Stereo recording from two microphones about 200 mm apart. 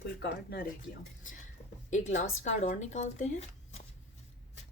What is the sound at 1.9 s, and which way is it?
Speech, 35° left (ahead or behind).